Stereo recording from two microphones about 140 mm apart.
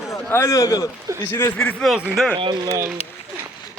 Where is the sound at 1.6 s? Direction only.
Centre (ahead or behind).